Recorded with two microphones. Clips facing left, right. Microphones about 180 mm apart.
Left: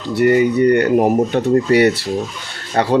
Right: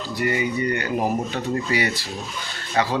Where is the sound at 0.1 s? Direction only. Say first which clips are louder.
Left 11 dB; 60° left (ahead or behind).